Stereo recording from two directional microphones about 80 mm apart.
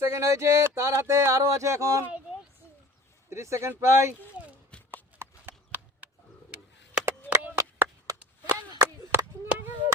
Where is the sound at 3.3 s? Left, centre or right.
Right.